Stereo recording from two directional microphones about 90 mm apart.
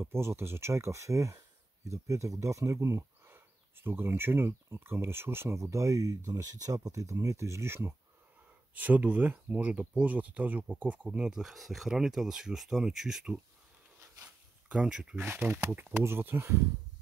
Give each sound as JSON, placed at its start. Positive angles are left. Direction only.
{"t": 0.0, "sound": "speech", "side_deg": -30}
{"t": 8.7, "sound": "speech", "side_deg": -15}
{"t": 14.7, "sound": "speech", "side_deg": -10}
{"t": 15.1, "sound": "speech", "side_deg": -20}